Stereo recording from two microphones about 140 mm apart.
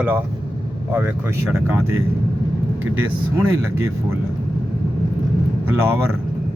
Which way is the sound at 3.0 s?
20° right (ahead or behind).